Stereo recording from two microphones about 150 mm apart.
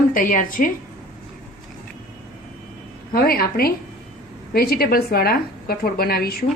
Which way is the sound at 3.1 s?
85° left.